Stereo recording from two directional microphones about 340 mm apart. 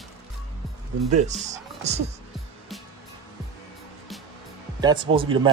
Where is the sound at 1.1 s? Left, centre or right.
Centre.